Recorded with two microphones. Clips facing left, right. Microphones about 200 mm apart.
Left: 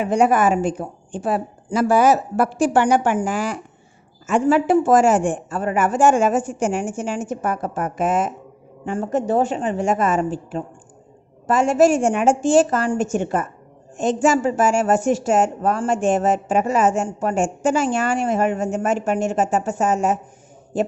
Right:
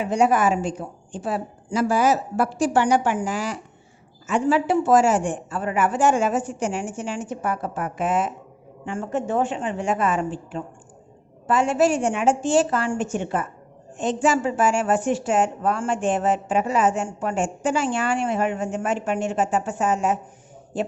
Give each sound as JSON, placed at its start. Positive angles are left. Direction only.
{"t": 0.0, "sound": "a woman's voice", "side_deg": 55}